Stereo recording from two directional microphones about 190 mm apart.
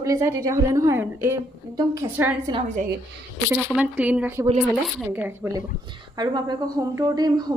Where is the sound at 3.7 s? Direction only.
5° right (ahead or behind).